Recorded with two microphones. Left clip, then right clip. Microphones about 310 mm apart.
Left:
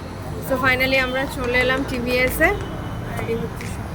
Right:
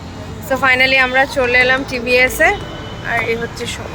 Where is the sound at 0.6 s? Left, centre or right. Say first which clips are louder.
Right 7 dB; centre.